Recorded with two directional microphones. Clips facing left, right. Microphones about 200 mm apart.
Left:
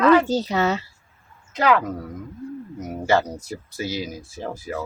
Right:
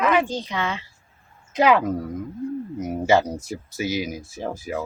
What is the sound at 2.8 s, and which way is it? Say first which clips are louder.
Speech: right 2 dB; 10° right (ahead or behind).